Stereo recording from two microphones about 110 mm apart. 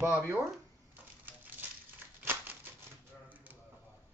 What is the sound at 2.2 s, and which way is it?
Crumpling, 20° right (ahead or behind).